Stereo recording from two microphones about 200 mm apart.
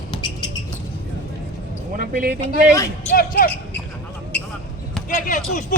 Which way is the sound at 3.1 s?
45° left (ahead or behind).